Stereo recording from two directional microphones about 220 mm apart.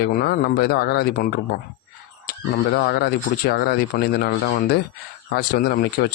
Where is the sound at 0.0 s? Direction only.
45° left (ahead or behind).